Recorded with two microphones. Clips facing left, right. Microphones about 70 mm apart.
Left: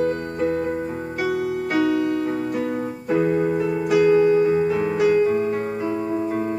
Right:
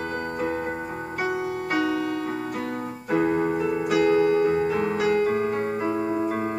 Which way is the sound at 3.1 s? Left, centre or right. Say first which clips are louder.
Left 2 dB; centre.